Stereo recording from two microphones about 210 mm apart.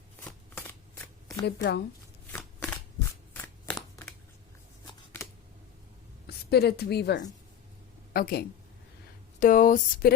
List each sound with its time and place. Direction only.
0.2 s shuffling cards: 10° left (ahead or behind)
1.5 s a woman's voice: 50° left (ahead or behind)
2.3 s shuffling cards: 5° left (ahead or behind)
3.8 s a sound: 15° left (ahead or behind)
4.9 s shuffling cards: 15° left (ahead or behind)
6.2 s a woman's voice: 50° left (ahead or behind)